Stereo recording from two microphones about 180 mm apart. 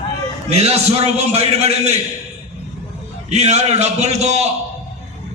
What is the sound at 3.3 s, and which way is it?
A man's voice, 35° right (ahead or behind).